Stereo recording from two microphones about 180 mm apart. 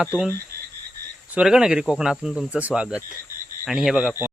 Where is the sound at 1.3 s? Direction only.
5° right (ahead or behind).